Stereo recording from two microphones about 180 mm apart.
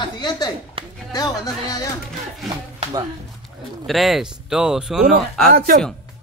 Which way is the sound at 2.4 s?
20° right (ahead or behind).